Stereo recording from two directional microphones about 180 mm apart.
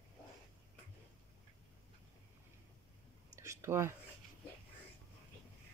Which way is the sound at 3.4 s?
15° right (ahead or behind).